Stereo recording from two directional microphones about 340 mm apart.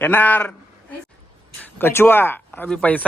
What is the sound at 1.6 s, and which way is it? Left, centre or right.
Speech, centre.